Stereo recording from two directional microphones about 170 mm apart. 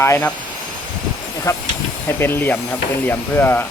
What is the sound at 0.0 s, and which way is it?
Speech, 10° left (ahead or behind).